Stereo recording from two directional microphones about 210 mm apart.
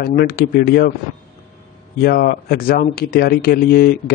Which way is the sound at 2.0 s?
45° left (ahead or behind).